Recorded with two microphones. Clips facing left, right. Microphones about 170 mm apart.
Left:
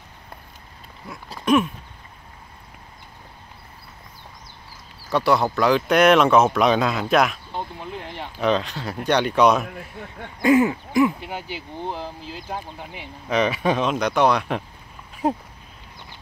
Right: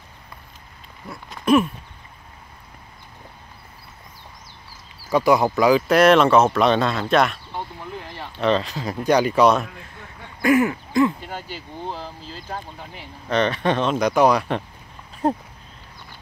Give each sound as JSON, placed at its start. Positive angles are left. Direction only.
{"t": 1.4, "sound": "a sound", "side_deg": 0}
{"t": 5.1, "sound": "speech", "side_deg": -10}
{"t": 7.5, "sound": "a sound", "side_deg": 20}
{"t": 8.4, "sound": "speech", "side_deg": 0}
{"t": 10.4, "sound": "speech", "side_deg": 20}
{"t": 13.3, "sound": "speech", "side_deg": 5}